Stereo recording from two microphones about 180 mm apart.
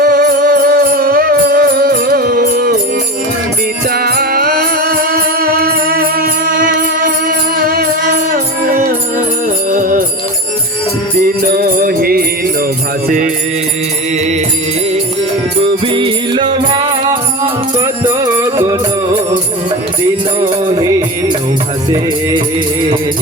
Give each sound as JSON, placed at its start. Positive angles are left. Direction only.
{"t": 0.0, "sound": "music", "side_deg": -60}
{"t": 3.9, "sound": "music", "side_deg": -60}
{"t": 11.4, "sound": "music", "side_deg": -50}
{"t": 15.6, "sound": "music", "side_deg": -30}
{"t": 17.7, "sound": "music", "side_deg": -20}
{"t": 20.4, "sound": "music", "side_deg": -25}